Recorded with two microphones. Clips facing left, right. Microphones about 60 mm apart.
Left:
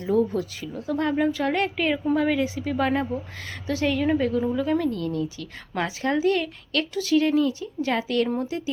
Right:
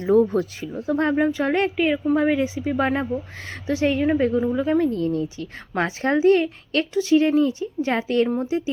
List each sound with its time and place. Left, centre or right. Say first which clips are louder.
0.0 s speech: right 5 dB; right
1.7 s a woman's voice: right 3 dB; centre
2.1 s a woman's voice: right 3 dB; right